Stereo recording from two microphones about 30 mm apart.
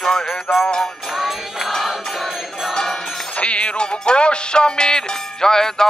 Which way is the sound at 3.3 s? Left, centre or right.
Left.